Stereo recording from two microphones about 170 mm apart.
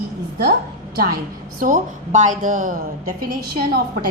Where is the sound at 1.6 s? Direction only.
50° right (ahead or behind).